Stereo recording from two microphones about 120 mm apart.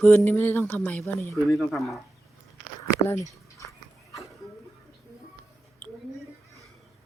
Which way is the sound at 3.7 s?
25° left (ahead or behind).